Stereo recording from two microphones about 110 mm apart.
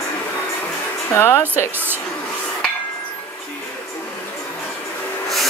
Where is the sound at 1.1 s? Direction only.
20° left (ahead or behind).